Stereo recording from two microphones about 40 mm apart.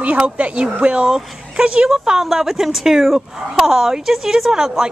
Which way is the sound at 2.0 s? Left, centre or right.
Centre.